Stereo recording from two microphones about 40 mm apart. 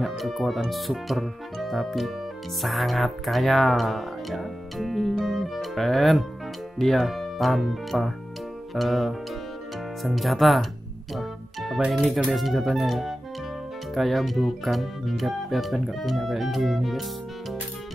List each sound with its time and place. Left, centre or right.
0.0 s speech: centre
11.1 s music: centre
12.0 s speech: right
12.4 s speech: centre